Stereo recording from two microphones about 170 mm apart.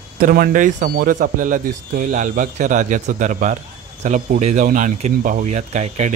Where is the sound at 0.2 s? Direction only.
55° right (ahead or behind).